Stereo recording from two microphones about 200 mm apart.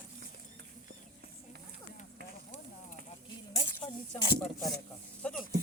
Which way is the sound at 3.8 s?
20° left (ahead or behind).